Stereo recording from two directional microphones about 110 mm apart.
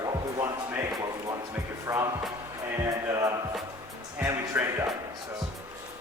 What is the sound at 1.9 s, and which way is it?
Speech, 15° right (ahead or behind).